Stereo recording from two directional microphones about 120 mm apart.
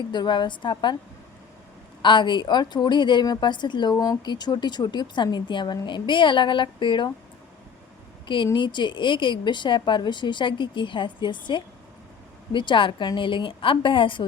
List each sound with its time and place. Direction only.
0.1 s a woman's voice: 40° left (ahead or behind)
2.0 s a woman's voice: 40° left (ahead or behind)
8.5 s a woman's voice: 40° left (ahead or behind)